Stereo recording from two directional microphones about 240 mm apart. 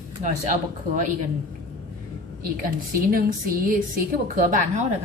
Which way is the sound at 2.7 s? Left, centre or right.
Right.